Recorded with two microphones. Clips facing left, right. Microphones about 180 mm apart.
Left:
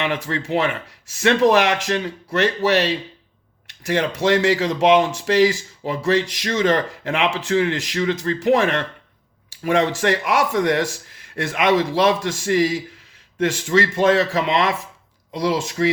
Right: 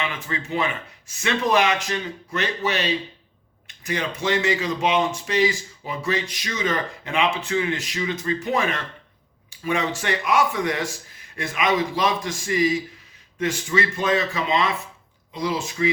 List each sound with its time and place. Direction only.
0.0 s speech: 75° left (ahead or behind)